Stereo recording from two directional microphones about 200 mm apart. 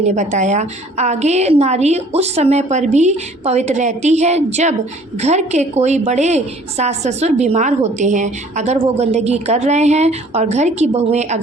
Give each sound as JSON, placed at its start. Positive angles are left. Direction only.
{"t": 0.0, "sound": "a woman's voice", "side_deg": -35}